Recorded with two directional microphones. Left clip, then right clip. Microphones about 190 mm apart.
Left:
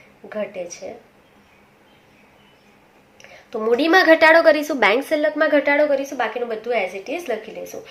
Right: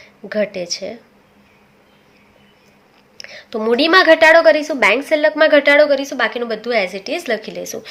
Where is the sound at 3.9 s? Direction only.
15° right (ahead or behind).